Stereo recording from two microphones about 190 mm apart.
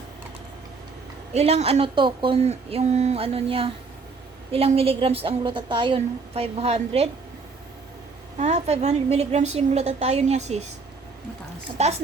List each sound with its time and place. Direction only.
1.3 s a woman's voice: 35° right (ahead or behind)
8.4 s a woman's voice: 35° right (ahead or behind)